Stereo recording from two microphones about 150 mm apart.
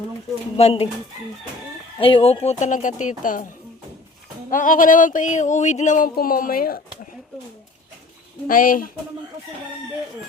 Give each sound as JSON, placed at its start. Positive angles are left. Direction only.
{"t": 0.5, "sound": "speech", "side_deg": 40}
{"t": 2.0, "sound": "speech", "side_deg": 35}
{"t": 4.5, "sound": "a sound", "side_deg": 60}
{"t": 6.1, "sound": "speech", "side_deg": 70}
{"t": 8.4, "sound": "speech", "side_deg": 70}